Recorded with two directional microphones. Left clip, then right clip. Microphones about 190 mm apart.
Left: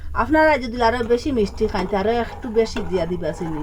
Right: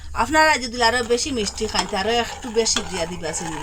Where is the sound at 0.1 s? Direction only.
15° left (ahead or behind).